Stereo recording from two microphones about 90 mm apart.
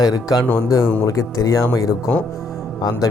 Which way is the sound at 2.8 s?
50° left (ahead or behind).